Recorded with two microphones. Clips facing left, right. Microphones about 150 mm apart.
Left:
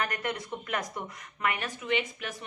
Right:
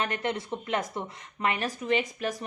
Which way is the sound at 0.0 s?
25° right (ahead or behind).